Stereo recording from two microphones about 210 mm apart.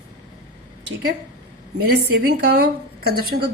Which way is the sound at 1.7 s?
50° right (ahead or behind).